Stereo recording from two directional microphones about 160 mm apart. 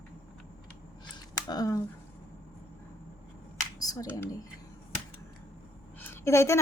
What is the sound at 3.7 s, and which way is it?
Computer keyboard, 20° left (ahead or behind).